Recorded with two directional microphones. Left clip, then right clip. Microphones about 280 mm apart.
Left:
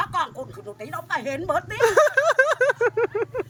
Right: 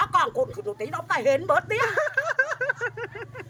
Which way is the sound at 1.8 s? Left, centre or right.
Left.